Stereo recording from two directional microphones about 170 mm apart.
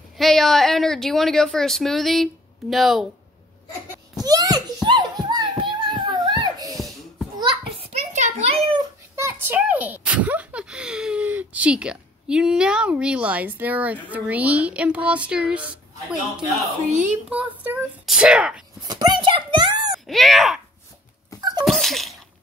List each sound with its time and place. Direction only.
0.2 s speech: centre (ahead or behind)
4.2 s a sound: 20° right (ahead or behind)
7.9 s a sound: 45° right (ahead or behind)
9.1 s a child's voice: 15° right (ahead or behind)
16.9 s a child's voice: 45° right (ahead or behind)
17.3 s speech: 5° right (ahead or behind)
18.9 s a sound: 25° right (ahead or behind)
20.1 s speech: centre (ahead or behind)
21.4 s sneeze: 25° right (ahead or behind)
21.6 s sneeze: centre (ahead or behind)